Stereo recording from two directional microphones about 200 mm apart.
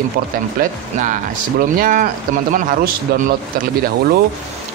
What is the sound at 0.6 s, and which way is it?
A man's voice, 40° right (ahead or behind).